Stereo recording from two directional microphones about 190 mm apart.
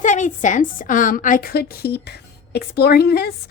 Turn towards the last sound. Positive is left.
turn(degrees=55)  # may be behind; listen again after turning